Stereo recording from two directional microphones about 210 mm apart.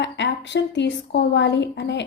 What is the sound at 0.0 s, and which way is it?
A woman's voice, 60° left (ahead or behind).